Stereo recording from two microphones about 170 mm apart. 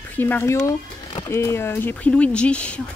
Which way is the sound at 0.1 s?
10° left (ahead or behind).